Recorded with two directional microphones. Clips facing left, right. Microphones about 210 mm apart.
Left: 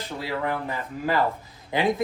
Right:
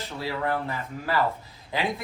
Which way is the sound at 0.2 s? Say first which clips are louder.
Even; 15° left (ahead or behind).